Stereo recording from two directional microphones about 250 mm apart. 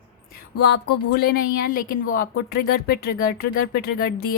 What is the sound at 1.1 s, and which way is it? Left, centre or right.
Speech, left.